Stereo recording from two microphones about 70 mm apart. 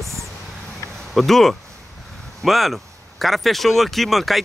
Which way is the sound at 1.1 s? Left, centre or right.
Centre.